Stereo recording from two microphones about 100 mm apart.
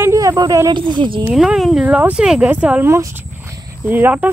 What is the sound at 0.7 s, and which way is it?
Speech, 50° right (ahead or behind).